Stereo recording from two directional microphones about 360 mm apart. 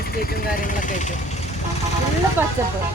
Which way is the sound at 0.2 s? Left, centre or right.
Left.